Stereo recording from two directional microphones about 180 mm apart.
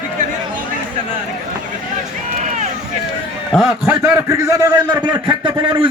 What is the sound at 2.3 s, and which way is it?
Run, 40° right (ahead or behind).